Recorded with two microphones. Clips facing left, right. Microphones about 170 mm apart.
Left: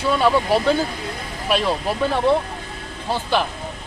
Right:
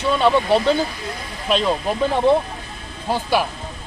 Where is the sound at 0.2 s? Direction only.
5° left (ahead or behind).